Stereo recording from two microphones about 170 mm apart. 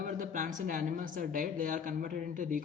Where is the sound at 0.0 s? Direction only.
50° right (ahead or behind).